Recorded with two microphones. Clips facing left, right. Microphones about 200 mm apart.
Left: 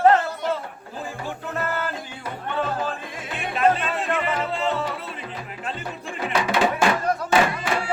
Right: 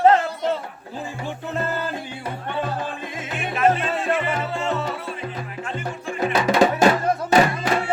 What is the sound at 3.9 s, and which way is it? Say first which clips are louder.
Music: right 2 dB; 30° right (ahead or behind).